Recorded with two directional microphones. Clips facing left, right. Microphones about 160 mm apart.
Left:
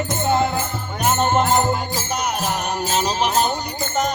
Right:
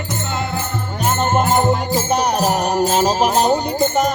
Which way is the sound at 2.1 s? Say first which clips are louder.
Right 6 dB; 35° right (ahead or behind).